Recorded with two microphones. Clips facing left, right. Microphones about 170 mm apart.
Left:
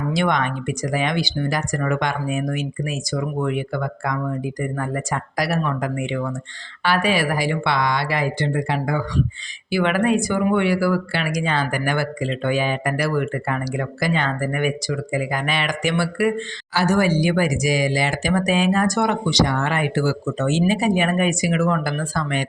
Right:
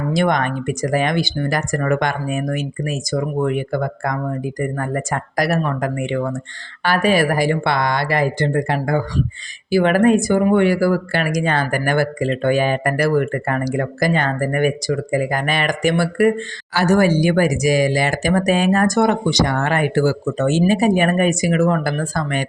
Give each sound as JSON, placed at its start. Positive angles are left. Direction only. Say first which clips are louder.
{"t": 0.1, "sound": "speech", "louder": "right 4 dB", "side_deg": -45}